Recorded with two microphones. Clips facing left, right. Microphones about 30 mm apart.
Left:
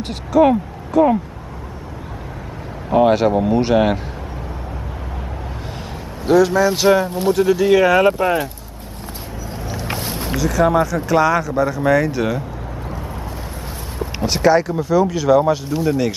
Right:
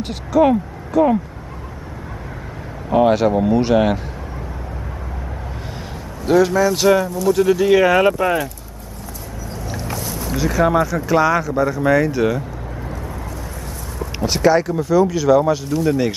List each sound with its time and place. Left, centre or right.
0.0 s speech: centre
2.9 s speech: centre
6.2 s a man's voice: centre
6.5 s speech: centre
7.1 s speech: left
7.3 s speech: centre
9.8 s boat: left
10.6 s speech: centre
14.2 s speech: centre
15.8 s speech: centre